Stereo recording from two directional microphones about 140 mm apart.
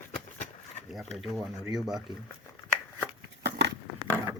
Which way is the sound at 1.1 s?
Centre (ahead or behind).